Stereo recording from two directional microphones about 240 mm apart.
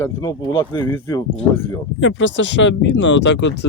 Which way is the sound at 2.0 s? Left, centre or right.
Left.